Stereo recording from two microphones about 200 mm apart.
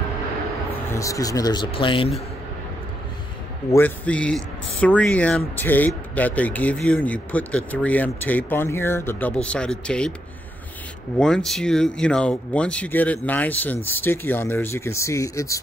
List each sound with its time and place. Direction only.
0.8 s speech: 15° left (ahead or behind)
3.7 s speech: 10° left (ahead or behind)
11.1 s speech: 5° left (ahead or behind)